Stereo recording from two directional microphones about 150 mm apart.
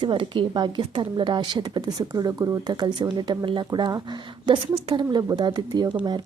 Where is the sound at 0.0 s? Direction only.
35° right (ahead or behind).